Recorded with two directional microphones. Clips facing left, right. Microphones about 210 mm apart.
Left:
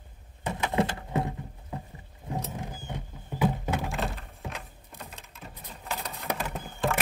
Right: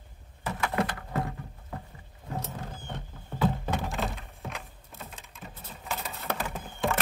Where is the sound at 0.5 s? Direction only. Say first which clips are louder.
Left 2 dB; 20° left (ahead or behind).